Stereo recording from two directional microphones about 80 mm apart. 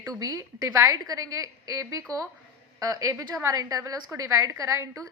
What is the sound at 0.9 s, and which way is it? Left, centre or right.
A woman's voice, right.